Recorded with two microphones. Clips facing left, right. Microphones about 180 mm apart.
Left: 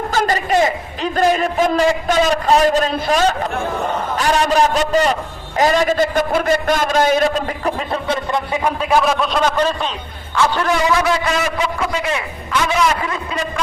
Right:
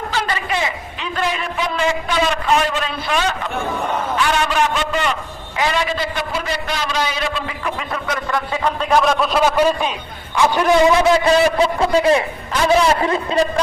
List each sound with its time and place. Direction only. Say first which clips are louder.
0.1 s a man's voice: left 6 dB; 45° left (ahead or behind)
8.0 s speech: left 1 dB; 30° left (ahead or behind)
8.5 s a man's voice: even; 10° left (ahead or behind); by 13.5 s 35° right (ahead or behind)